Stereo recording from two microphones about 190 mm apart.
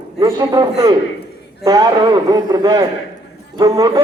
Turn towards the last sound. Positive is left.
turn(degrees=-20)  # may be behind; listen again after turning